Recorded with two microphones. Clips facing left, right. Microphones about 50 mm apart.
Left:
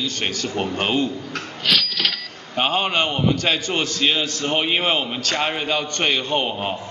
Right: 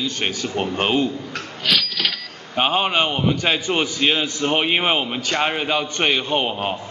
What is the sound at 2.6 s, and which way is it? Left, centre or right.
A man's voice, centre.